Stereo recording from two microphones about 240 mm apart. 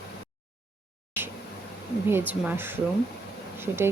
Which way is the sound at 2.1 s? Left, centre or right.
Centre.